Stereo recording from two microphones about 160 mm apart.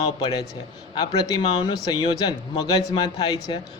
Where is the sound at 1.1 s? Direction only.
25° left (ahead or behind).